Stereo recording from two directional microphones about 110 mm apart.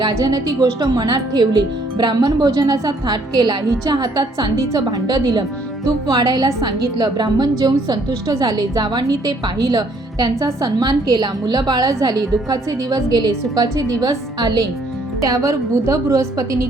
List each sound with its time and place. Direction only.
0.0 s a woman's voice: 35° right (ahead or behind)